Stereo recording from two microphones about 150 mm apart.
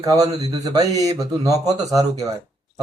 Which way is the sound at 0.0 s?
25° right (ahead or behind).